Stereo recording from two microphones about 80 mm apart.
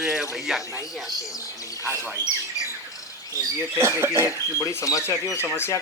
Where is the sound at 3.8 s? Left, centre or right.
Right.